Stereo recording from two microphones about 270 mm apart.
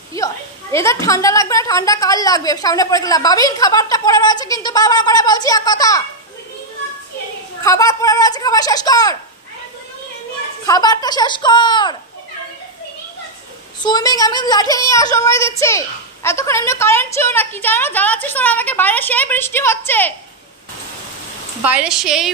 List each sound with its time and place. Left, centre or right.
0.1 s a woman's voice: centre
7.6 s a woman's voice: centre
10.6 s a woman's voice: centre
13.8 s a woman's voice: centre
21.6 s a woman's voice: centre